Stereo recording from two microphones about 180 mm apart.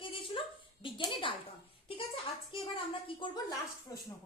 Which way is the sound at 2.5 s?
30° left (ahead or behind).